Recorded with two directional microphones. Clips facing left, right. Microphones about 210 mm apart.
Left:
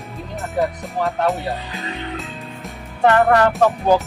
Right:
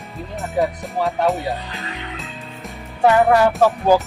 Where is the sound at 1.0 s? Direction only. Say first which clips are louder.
Right 1 dB; centre (ahead or behind).